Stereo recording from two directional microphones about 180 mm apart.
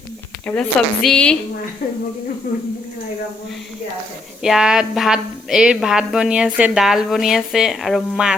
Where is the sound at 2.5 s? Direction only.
55° left (ahead or behind).